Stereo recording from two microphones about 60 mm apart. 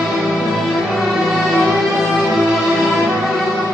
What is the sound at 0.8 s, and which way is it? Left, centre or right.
Music, centre.